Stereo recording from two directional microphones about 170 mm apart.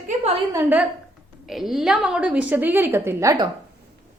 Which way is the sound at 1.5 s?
Centre (ahead or behind).